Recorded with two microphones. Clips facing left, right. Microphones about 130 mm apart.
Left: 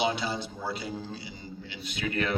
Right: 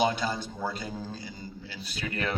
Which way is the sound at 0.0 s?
45° right (ahead or behind).